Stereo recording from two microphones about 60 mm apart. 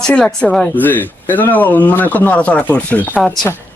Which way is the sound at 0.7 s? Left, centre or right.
Left.